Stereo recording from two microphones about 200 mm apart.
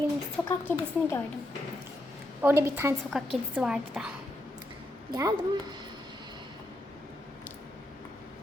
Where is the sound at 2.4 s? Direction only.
10° right (ahead or behind).